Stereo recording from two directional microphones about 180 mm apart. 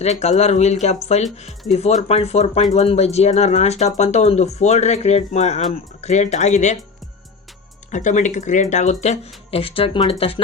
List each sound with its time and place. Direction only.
0.0 s speech: 40° left (ahead or behind)
7.9 s speech: 45° left (ahead or behind)